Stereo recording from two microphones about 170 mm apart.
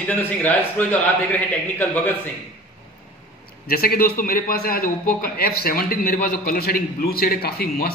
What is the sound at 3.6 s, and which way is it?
A man's voice, 60° left (ahead or behind).